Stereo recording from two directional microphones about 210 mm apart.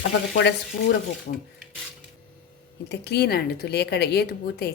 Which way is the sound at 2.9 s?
50° left (ahead or behind).